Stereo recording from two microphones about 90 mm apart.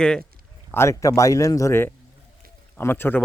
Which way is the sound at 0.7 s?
30° left (ahead or behind).